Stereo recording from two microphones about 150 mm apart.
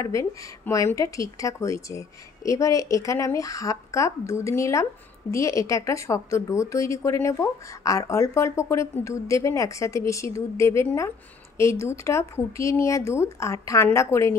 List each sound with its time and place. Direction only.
0.0 s a woman's voice: 20° left (ahead or behind)